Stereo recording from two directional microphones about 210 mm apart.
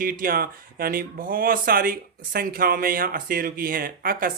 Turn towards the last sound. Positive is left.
turn(degrees=-45)  # may be behind; listen again after turning